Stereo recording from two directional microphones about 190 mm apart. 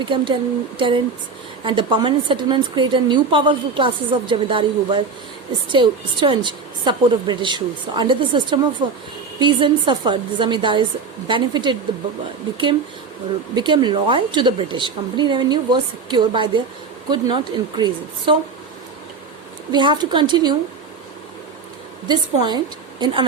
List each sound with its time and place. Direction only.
0.0 s a woman's voice: 25° right (ahead or behind)
13.6 s a woman's voice: 25° right (ahead or behind)
19.7 s a woman's voice: 25° right (ahead or behind)
22.0 s a woman's voice: 20° right (ahead or behind)